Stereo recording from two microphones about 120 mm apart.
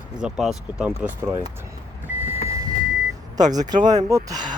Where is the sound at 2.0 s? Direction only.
15° right (ahead or behind).